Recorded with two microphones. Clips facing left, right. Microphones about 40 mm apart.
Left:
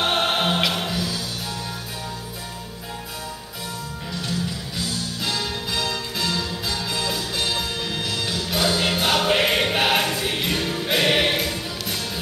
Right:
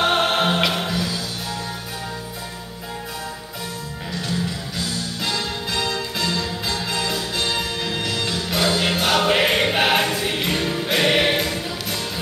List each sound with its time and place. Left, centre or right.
0.0 s music: centre
5.9 s music: centre